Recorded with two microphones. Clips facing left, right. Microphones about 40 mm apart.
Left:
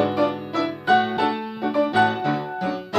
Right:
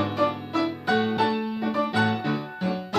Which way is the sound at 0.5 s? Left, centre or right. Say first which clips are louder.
Left 6 dB; centre.